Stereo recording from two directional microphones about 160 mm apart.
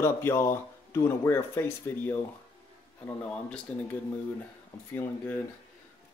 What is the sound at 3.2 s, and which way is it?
Speech, 5° left (ahead or behind).